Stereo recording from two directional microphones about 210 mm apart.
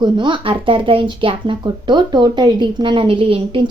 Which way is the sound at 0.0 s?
20° right (ahead or behind).